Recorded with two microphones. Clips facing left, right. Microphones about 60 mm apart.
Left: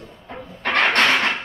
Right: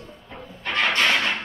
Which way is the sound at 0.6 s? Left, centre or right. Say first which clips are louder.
Left 4 dB; left.